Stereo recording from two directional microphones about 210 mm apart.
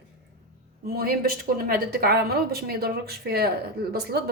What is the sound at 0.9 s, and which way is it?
Speech, 45° right (ahead or behind).